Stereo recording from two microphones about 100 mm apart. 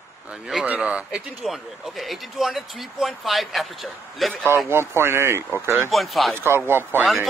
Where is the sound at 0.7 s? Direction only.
10° right (ahead or behind).